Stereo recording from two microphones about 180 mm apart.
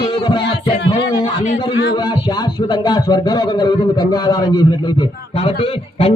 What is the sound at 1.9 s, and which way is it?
Speech, 25° left (ahead or behind).